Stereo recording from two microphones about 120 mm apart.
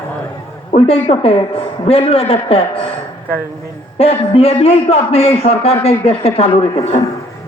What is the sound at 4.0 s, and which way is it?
A man's voice, 55° left (ahead or behind).